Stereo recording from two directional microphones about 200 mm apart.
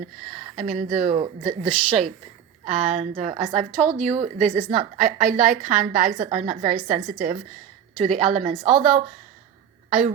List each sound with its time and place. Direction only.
0.3 s a woman's voice: 35° right (ahead or behind)